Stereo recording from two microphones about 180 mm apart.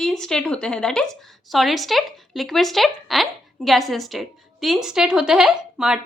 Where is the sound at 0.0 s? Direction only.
5° left (ahead or behind).